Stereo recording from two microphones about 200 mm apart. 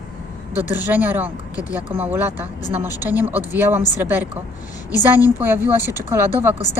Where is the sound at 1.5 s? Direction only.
15° left (ahead or behind).